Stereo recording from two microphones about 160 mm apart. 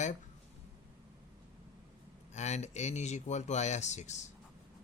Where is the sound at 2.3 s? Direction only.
45° left (ahead or behind).